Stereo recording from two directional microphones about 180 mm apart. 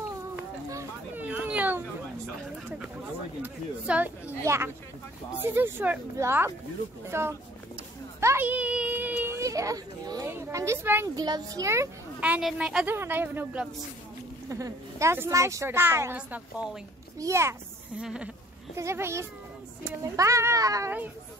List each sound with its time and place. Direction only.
0.7 s a sound: 15° right (ahead or behind)
3.4 s a child's voice: 10° right (ahead or behind)
17.2 s a child's voice: 15° right (ahead or behind)
18.0 s a child's voice: 5° right (ahead or behind)